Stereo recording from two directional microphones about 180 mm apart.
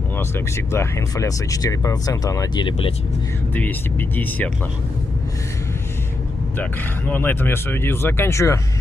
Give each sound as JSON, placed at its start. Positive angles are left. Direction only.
{"t": 0.7, "sound": "speech", "side_deg": 15}
{"t": 6.6, "sound": "speech", "side_deg": 10}